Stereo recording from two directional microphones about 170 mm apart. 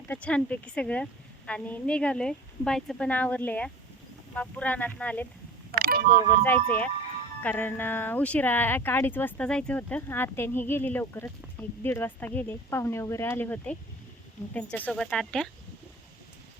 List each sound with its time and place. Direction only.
0.1 s speech: 5° left (ahead or behind)
5.7 s a sound: 60° right (ahead or behind)
6.4 s speech: 10° left (ahead or behind)